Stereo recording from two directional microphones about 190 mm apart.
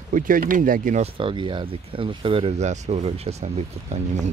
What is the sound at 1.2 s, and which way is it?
Speech, 25° right (ahead or behind).